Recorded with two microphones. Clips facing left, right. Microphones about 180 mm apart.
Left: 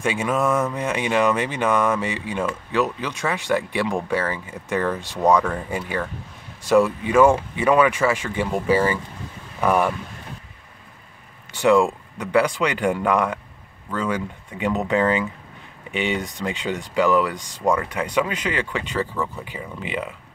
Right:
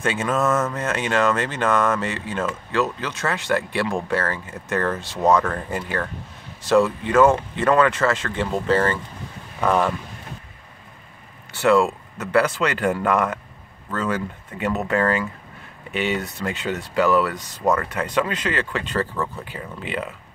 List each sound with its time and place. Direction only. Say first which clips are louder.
0.0 s speech: even; 10° left (ahead or behind)
11.5 s speech: left 1 dB; 15° left (ahead or behind)